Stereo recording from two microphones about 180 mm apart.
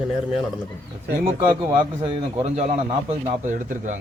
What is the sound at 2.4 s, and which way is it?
Speech, 40° right (ahead or behind).